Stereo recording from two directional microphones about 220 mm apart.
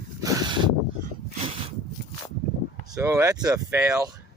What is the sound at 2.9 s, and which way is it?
Speech, 15° right (ahead or behind).